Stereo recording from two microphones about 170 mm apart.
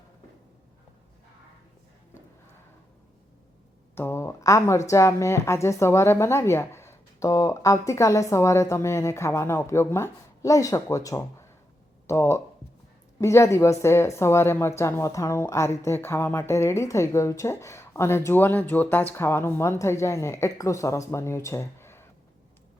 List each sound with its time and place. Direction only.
3.9 s a woman's voice: 15° left (ahead or behind)